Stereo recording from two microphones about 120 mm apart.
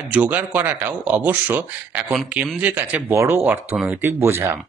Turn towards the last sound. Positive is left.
turn(degrees=-20)  # may be behind; listen again after turning